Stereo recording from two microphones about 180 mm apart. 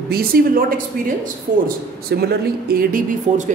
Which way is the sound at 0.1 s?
55° right (ahead or behind).